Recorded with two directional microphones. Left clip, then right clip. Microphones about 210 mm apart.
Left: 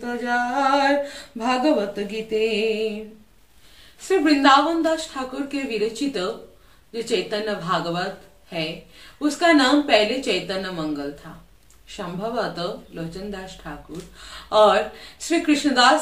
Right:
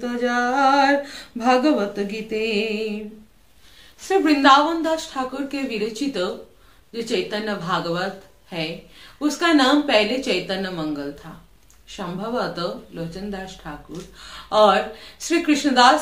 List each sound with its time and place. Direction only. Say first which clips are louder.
0.0 s a sound: right 2 dB; 10° right (ahead or behind)
4.2 s a woman's voice: right 1 dB; 5° right (ahead or behind)
12.2 s a woman's voice: right 1 dB; 5° right (ahead or behind)